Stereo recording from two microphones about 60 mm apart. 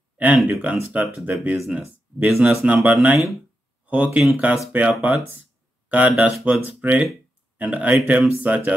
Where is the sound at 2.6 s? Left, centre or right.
Right.